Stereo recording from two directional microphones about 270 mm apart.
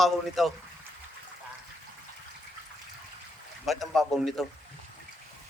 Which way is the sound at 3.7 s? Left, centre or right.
Centre.